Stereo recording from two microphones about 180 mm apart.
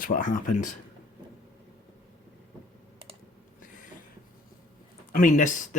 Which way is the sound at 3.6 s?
45° left (ahead or behind).